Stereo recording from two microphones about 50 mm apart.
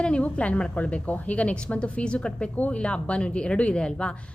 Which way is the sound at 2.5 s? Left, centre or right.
Left.